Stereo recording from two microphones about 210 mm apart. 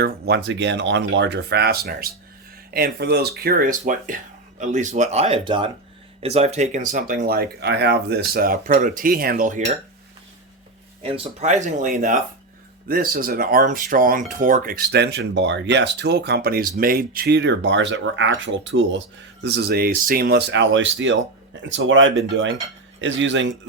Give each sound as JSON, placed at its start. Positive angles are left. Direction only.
{"t": 0.0, "sound": "speech", "side_deg": -55}
{"t": 11.0, "sound": "speech", "side_deg": -25}